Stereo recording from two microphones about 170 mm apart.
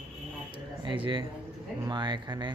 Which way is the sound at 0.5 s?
30° right (ahead or behind).